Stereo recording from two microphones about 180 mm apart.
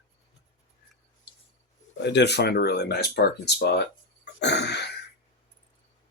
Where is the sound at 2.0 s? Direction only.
70° left (ahead or behind).